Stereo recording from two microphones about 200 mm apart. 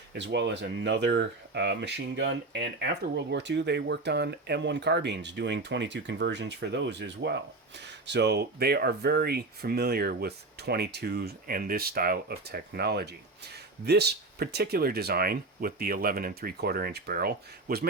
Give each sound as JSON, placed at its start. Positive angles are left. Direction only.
{"t": 0.1, "sound": "speech", "side_deg": -60}